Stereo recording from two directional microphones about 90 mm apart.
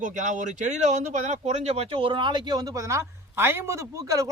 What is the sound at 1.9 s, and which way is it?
Speech, 70° right (ahead or behind).